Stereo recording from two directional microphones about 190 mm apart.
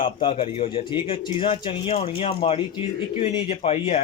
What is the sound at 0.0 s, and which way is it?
Speech, 25° left (ahead or behind).